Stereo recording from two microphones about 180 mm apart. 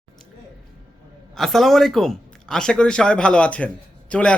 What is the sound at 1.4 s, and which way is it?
Speech, centre (ahead or behind).